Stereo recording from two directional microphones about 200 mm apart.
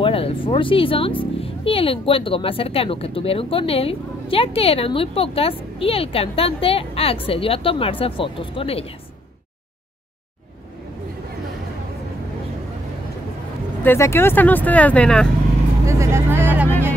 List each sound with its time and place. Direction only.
0.0 s speech: 25° left (ahead or behind)
13.8 s speech: 15° left (ahead or behind)
15.9 s speech: 15° right (ahead or behind)